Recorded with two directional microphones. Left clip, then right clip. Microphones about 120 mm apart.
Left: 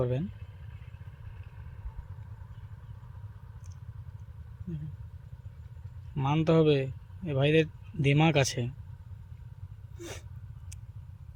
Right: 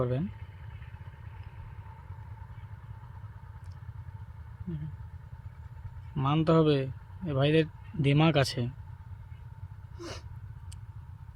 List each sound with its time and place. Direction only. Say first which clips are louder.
0.0 s speech: even; 15° right (ahead or behind)
6.1 s speech: even; 15° right (ahead or behind)
10.0 s a sound: right 1 dB; 15° right (ahead or behind)